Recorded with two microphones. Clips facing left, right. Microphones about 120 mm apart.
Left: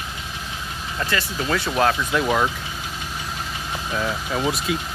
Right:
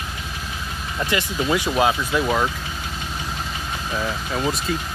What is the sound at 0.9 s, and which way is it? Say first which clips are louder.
Speech: right 2 dB; 15° right (ahead or behind).